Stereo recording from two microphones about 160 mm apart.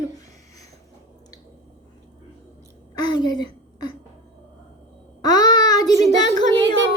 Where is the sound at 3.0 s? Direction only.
25° left (ahead or behind).